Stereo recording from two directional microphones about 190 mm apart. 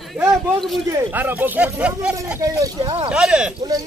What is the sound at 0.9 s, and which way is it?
Speech, 10° right (ahead or behind).